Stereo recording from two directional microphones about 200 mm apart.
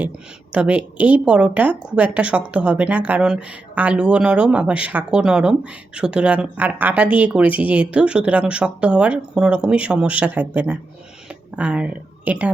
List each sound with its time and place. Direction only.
0.5 s speech: 5° right (ahead or behind)